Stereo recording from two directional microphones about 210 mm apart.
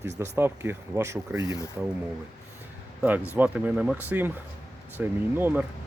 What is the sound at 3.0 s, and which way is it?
Speech, 10° right (ahead or behind).